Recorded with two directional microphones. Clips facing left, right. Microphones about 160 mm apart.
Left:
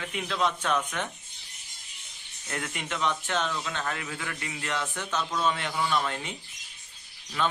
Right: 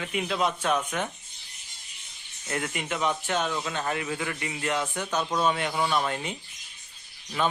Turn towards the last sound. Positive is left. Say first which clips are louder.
# right 2 dB
turn(degrees=-15)  # may be behind; listen again after turning